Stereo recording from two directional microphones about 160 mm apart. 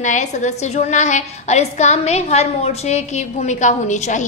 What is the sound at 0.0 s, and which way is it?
A woman's voice, 50° left (ahead or behind).